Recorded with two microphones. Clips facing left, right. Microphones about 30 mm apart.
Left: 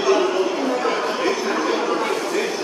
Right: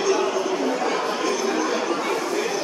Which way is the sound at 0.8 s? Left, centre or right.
Left.